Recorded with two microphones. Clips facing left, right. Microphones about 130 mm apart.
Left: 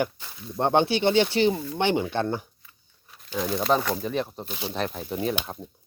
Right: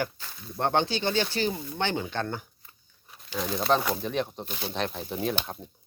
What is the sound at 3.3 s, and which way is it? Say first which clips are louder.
Speech: left 2 dB; centre (ahead or behind).